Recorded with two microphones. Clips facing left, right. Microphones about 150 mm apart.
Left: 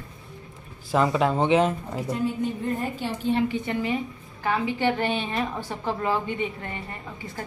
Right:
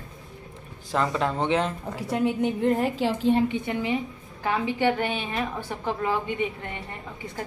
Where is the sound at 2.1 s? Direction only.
75° right (ahead or behind).